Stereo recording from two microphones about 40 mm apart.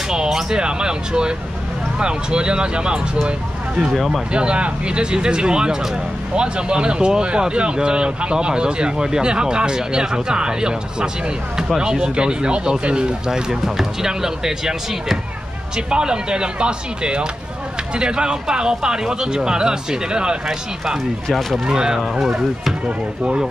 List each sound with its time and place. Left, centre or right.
0.1 s speech: centre
3.8 s speech: centre
4.3 s speech: right
13.5 s speech: centre
21.3 s speech: centre
21.6 s speech: centre
22.8 s speech: right